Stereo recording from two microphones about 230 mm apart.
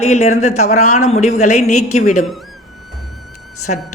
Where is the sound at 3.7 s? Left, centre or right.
Left.